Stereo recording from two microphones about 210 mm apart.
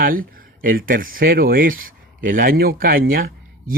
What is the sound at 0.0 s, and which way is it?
Speech, 40° right (ahead or behind).